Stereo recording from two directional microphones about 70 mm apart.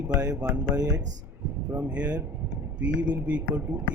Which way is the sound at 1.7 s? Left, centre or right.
Right.